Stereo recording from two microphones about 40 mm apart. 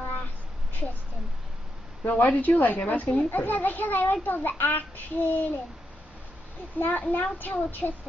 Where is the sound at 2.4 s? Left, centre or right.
Left.